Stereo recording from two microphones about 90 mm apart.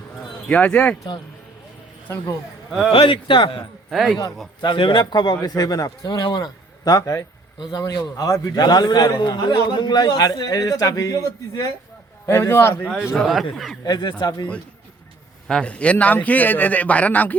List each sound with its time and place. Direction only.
0.4 s a man's voice: 15° left (ahead or behind)
2.9 s a man's voice: 75° left (ahead or behind)
3.8 s speech: centre (ahead or behind)
4.6 s a man's voice: 65° left (ahead or behind); by 11.6 s 40° left (ahead or behind)
12.2 s a man's voice: 30° left (ahead or behind)
13.1 s speech: centre (ahead or behind)
13.8 s a man's voice: 50° left (ahead or behind)
15.4 s a man's voice: 10° left (ahead or behind)